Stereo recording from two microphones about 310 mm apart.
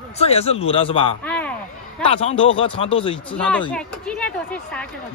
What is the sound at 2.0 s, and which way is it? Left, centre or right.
Speech, centre.